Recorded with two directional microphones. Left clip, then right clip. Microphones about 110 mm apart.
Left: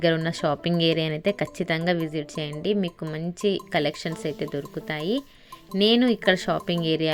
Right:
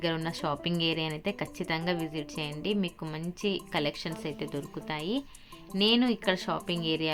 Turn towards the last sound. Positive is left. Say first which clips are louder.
# left 6 dB
turn(degrees=60)  # may be behind; listen again after turning